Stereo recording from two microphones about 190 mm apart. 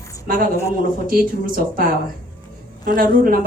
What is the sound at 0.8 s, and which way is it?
A woman's voice, 50° right (ahead or behind).